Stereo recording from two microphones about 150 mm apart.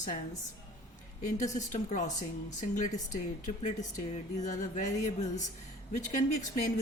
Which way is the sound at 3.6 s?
50° left (ahead or behind).